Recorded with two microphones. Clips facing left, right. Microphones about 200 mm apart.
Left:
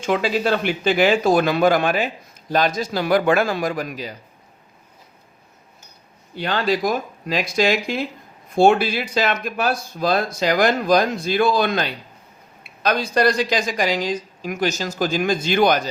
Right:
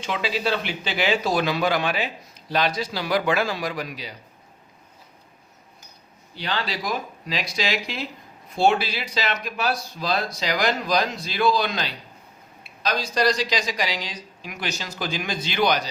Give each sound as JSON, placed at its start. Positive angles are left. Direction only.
{"t": 0.0, "sound": "speech", "side_deg": 50}
{"t": 6.3, "sound": "speech", "side_deg": 50}